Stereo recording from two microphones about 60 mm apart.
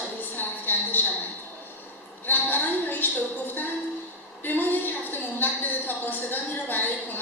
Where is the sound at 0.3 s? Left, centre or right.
Left.